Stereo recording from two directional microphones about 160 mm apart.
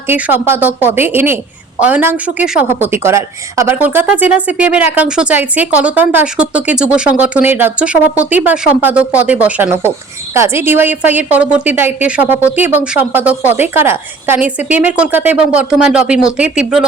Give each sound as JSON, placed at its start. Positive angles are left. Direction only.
{"t": 0.1, "sound": "a woman's voice", "side_deg": -10}